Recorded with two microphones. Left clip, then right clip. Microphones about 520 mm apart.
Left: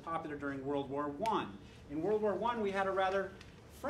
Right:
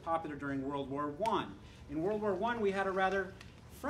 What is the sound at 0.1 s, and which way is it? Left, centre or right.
Speech, right.